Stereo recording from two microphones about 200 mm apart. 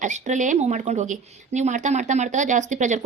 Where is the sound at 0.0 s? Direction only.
35° right (ahead or behind).